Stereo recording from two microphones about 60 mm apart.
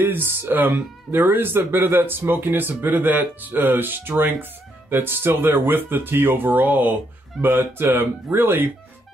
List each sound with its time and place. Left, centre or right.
0.0 s speech: right
7.4 s speech: right